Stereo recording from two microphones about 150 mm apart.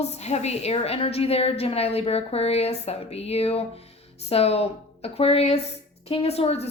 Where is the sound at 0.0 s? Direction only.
45° left (ahead or behind).